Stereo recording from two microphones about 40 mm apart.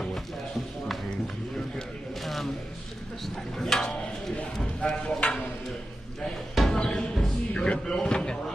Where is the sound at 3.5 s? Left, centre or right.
Centre.